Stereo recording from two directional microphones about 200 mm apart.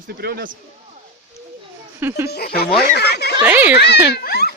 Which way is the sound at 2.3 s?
50° left (ahead or behind).